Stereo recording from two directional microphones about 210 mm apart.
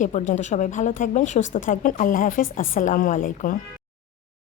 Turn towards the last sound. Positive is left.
turn(degrees=40)  # may be behind; listen again after turning